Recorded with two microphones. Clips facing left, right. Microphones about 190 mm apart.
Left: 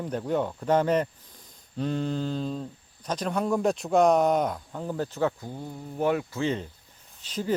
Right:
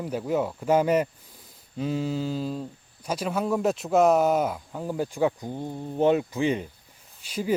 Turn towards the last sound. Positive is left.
turn(degrees=-10)  # may be behind; listen again after turning